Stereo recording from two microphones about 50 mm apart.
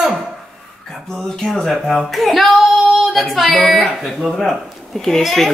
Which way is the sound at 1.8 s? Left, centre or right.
Centre.